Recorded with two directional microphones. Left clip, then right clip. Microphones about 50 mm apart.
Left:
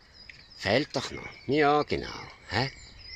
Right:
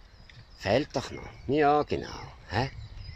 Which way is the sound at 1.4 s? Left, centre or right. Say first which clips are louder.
Even; left.